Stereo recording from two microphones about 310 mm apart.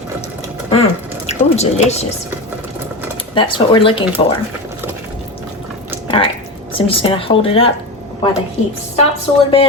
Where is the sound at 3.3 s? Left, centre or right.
Centre.